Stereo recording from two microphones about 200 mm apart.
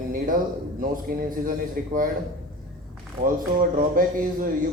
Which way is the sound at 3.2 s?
45° right (ahead or behind).